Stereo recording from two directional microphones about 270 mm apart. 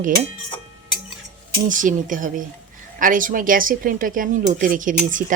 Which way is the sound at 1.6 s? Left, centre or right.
Right.